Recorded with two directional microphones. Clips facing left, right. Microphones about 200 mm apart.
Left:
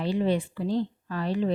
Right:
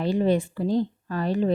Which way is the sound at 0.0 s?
45° right (ahead or behind).